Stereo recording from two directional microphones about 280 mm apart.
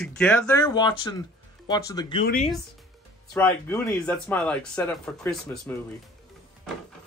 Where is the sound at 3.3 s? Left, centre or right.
Centre.